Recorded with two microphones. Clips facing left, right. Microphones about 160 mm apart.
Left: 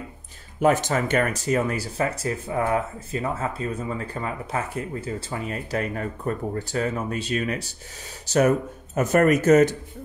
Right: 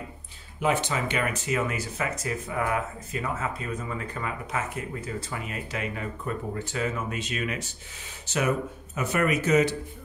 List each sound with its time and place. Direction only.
0.6 s speech: 45° left (ahead or behind)